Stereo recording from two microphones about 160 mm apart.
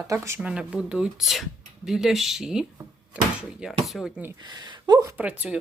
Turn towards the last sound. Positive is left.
turn(degrees=-5)  # may be behind; listen again after turning